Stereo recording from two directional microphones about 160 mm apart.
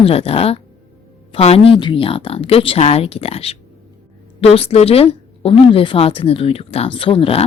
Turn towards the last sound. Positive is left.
turn(degrees=35)  # may be behind; listen again after turning